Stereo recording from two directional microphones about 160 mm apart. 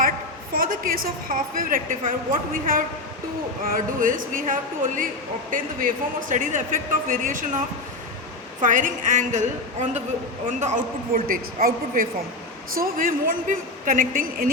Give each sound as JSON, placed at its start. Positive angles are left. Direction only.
{"t": 0.5, "sound": "a woman's voice", "side_deg": -65}
{"t": 8.6, "sound": "a woman's voice", "side_deg": -55}